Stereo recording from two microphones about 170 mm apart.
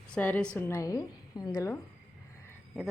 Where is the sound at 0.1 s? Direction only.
10° left (ahead or behind).